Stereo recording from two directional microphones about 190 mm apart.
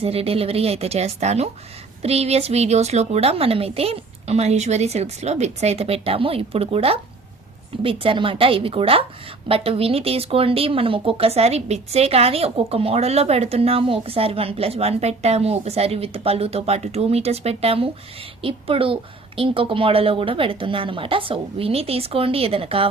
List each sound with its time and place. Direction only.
0.0 s a woman's voice: 30° right (ahead or behind)